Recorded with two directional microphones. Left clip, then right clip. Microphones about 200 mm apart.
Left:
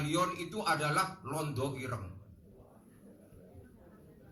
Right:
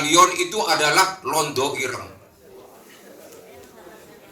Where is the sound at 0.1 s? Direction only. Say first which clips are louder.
Right 18 dB; 15° right (ahead or behind).